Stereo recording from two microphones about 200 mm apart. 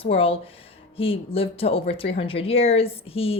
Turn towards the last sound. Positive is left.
turn(degrees=30)  # may be behind; listen again after turning